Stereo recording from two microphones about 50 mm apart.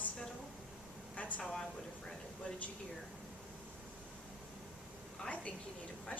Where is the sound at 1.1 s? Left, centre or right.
Left.